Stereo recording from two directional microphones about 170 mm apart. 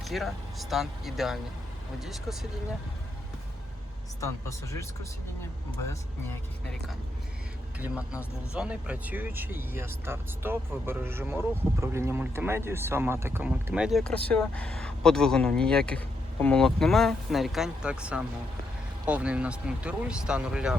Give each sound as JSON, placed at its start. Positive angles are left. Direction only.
{"t": 0.0, "sound": "speech", "side_deg": 0}
{"t": 4.2, "sound": "speech", "side_deg": 15}
{"t": 7.8, "sound": "speech", "side_deg": -5}